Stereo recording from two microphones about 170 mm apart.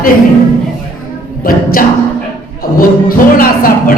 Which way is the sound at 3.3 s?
55° left (ahead or behind).